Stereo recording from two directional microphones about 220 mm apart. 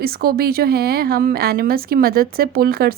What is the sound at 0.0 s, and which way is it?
Speech, 45° right (ahead or behind).